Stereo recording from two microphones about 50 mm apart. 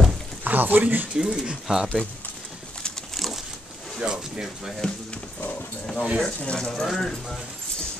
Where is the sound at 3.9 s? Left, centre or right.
Centre.